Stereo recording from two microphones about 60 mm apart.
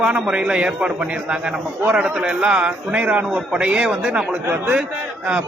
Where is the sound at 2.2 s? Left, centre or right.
Centre.